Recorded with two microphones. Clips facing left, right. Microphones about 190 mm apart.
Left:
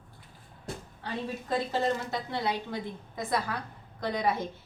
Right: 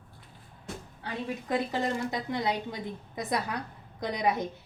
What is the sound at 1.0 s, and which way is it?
A woman's voice, 15° right (ahead or behind).